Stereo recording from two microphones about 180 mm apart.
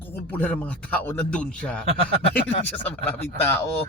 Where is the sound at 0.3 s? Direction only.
5° left (ahead or behind).